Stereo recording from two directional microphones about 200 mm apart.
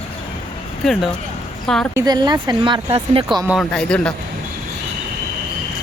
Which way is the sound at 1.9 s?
20° right (ahead or behind).